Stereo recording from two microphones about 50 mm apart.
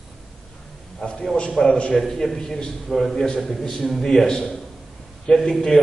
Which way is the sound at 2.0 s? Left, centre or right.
Centre.